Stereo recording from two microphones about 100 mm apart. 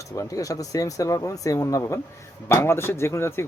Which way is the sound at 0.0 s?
30° left (ahead or behind).